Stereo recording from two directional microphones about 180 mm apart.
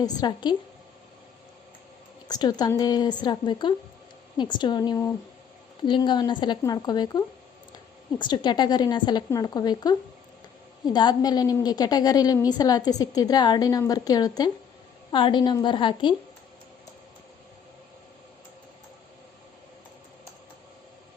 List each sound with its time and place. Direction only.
0.0 s a woman's voice: 20° left (ahead or behind)
2.2 s a woman's voice: 20° left (ahead or behind)